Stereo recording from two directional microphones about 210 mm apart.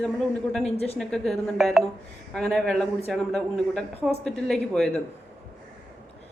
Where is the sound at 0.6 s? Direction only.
30° left (ahead or behind).